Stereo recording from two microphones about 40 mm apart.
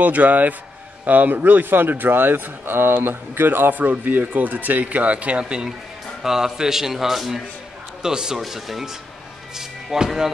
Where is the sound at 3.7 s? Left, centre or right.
Right.